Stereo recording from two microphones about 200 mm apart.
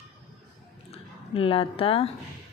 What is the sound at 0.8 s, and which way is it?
Speech, 30° left (ahead or behind).